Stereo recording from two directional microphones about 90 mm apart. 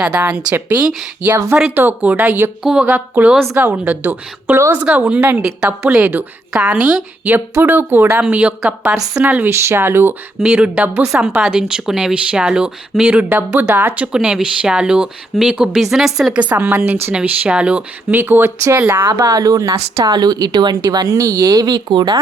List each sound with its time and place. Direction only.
0.0 s a woman's voice: 15° right (ahead or behind)
7.3 s a woman's voice: 20° right (ahead or behind)
10.4 s speech: 10° right (ahead or behind)
11.0 s speech: 5° right (ahead or behind)
18.2 s a woman's voice: 25° right (ahead or behind)
19.1 s speech: 40° right (ahead or behind)
20.1 s speech: 50° right (ahead or behind)